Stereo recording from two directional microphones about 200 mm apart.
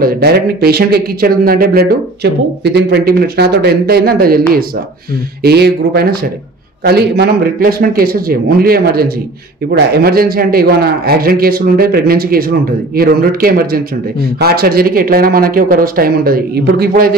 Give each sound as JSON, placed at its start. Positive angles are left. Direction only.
{"t": 0.0, "sound": "a man's voice", "side_deg": -50}